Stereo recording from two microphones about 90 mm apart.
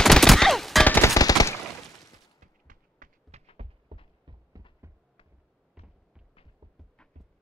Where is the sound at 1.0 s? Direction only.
40° left (ahead or behind).